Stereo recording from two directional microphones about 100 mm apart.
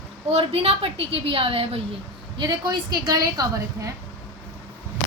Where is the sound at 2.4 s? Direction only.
45° right (ahead or behind).